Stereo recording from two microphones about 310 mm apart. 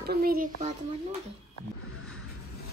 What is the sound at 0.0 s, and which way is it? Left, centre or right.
Speech, right.